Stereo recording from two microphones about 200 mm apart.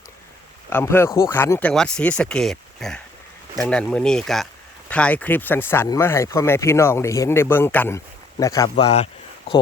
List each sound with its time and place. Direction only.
0.7 s speech: 10° left (ahead or behind)
8.7 s speech: 30° left (ahead or behind)